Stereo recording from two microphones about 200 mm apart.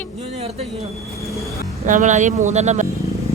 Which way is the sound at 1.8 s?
40° right (ahead or behind).